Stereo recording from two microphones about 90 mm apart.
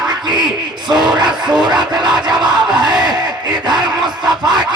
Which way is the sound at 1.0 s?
55° right (ahead or behind).